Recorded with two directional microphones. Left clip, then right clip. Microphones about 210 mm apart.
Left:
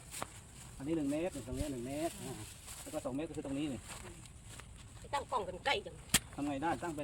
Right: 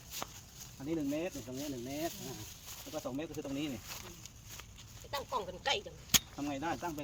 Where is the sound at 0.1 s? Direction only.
5° left (ahead or behind).